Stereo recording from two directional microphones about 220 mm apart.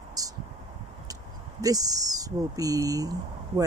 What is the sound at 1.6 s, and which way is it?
Speech, 15° right (ahead or behind).